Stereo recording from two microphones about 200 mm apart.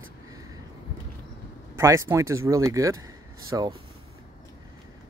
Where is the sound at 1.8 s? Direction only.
15° right (ahead or behind).